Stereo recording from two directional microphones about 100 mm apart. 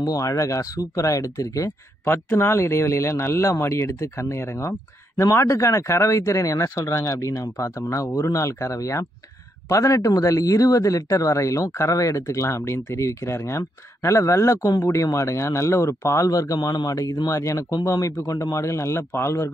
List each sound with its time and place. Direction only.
0.0 s speech: 35° left (ahead or behind)